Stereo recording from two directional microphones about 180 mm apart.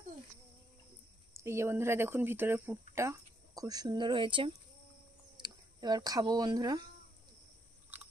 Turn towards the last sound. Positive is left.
turn(degrees=-20)  # may be behind; listen again after turning